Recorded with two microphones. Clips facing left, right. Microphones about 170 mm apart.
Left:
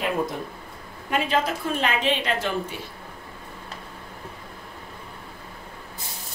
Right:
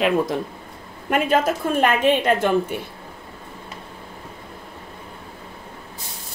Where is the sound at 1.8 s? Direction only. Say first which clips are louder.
Right 8 dB; 50° right (ahead or behind).